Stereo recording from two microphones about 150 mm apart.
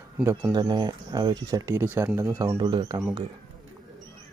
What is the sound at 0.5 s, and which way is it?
Speech, 30° right (ahead or behind).